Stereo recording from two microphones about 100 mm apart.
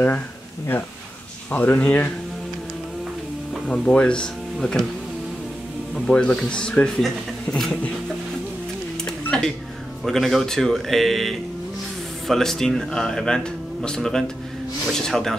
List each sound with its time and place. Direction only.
1.5 s speech: 15° left (ahead or behind)
3.6 s speech: 10° left (ahead or behind)
5.9 s speech: 10° left (ahead or behind)
9.0 s a sound: 10° left (ahead or behind)
10.0 s speech: centre (ahead or behind)